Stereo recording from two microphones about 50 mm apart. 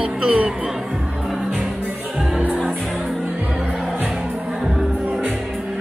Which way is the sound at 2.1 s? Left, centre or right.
Right.